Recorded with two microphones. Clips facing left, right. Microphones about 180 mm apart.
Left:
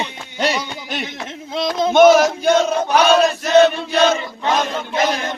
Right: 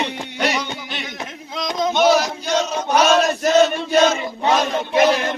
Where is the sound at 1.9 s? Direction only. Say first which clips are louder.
Left 7 dB; 50° left (ahead or behind).